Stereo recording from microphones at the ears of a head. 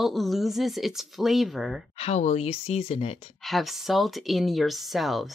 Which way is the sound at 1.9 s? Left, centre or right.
Left.